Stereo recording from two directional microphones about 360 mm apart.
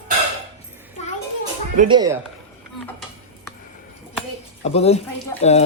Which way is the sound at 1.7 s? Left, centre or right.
Centre.